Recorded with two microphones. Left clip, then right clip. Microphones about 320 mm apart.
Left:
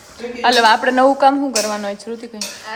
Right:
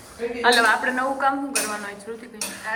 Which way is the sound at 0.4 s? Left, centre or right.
Centre.